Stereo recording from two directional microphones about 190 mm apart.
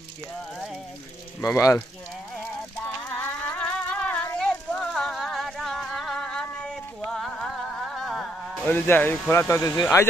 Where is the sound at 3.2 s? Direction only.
10° left (ahead or behind).